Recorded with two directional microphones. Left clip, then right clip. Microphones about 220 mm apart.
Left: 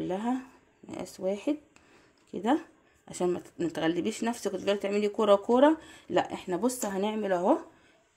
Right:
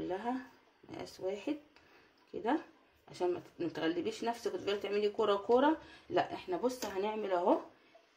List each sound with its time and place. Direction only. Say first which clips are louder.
0.0 s a sound: left 6 dB; 55° left (ahead or behind)
0.9 s speech: left 7 dB; 55° left (ahead or behind)
3.1 s speech: left 5 dB; 55° left (ahead or behind)